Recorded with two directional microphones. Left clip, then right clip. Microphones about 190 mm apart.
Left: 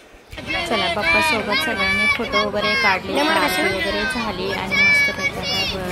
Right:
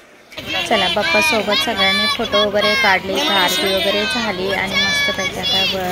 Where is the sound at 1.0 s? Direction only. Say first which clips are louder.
Right 2 dB; 10° left (ahead or behind).